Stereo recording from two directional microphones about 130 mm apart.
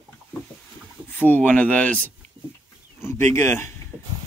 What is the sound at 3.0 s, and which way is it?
Speech, 20° left (ahead or behind).